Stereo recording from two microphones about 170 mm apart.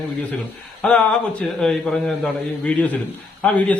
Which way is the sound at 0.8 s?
5° left (ahead or behind).